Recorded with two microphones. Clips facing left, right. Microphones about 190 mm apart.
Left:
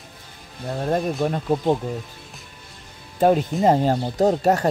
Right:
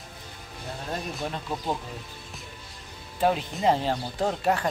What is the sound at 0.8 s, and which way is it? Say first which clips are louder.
Speech: left 11 dB; 50° left (ahead or behind).